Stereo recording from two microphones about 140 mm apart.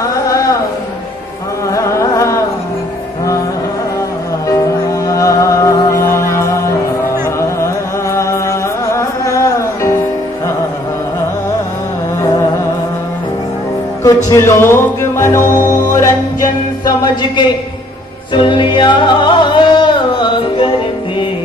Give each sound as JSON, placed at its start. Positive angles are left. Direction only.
{"t": 0.1, "sound": "a sound", "side_deg": 25}
{"t": 1.7, "sound": "music", "side_deg": 20}
{"t": 4.5, "sound": "music", "side_deg": 25}
{"t": 14.0, "sound": "music", "side_deg": 20}